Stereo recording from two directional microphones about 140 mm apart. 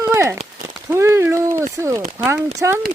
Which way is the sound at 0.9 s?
20° right (ahead or behind).